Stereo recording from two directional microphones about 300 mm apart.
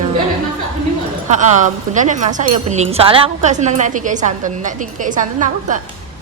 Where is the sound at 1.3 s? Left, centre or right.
Right.